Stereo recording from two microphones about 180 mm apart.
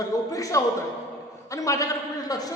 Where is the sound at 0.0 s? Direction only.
20° left (ahead or behind).